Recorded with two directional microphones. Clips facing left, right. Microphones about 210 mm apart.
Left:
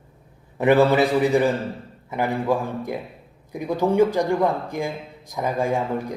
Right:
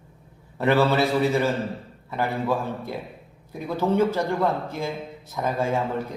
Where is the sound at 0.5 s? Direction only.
15° left (ahead or behind).